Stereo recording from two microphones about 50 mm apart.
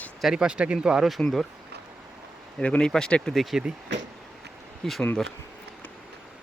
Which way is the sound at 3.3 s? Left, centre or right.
Centre.